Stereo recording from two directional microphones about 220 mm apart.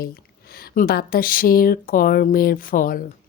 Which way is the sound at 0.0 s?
45° left (ahead or behind).